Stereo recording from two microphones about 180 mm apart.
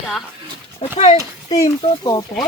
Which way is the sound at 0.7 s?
35° left (ahead or behind).